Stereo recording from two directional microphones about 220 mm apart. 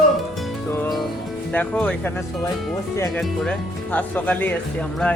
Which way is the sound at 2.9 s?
10° left (ahead or behind).